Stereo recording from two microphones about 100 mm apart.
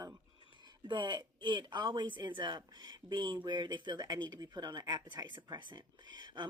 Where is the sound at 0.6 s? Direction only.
50° right (ahead or behind).